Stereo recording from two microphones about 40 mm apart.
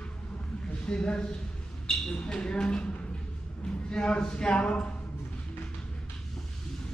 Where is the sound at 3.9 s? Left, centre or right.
Left.